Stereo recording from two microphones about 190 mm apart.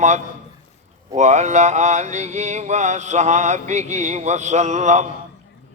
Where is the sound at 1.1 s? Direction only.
35° right (ahead or behind).